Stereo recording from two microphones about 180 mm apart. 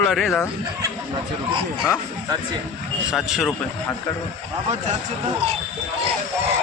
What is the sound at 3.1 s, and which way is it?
Speech, centre (ahead or behind).